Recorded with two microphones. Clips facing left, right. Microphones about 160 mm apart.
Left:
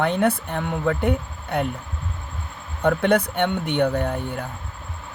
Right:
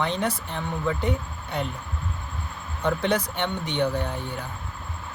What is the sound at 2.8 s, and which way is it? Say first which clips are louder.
Speech: left 5 dB; 55° left (ahead or behind).